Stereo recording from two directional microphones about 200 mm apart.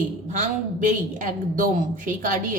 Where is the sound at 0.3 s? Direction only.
40° right (ahead or behind).